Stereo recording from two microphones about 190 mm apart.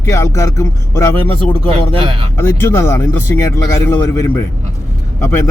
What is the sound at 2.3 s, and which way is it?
Speech, 10° left (ahead or behind).